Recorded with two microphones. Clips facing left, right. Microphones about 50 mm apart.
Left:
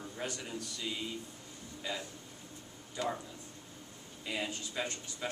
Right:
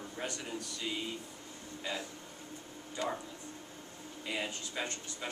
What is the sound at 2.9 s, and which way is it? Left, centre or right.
Speech, centre.